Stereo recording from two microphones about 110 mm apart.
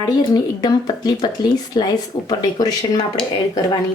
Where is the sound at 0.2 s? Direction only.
35° left (ahead or behind).